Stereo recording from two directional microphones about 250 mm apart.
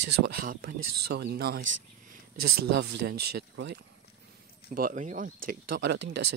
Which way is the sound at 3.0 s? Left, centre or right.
Right.